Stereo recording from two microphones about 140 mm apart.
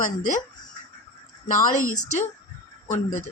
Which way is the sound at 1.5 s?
70° left (ahead or behind).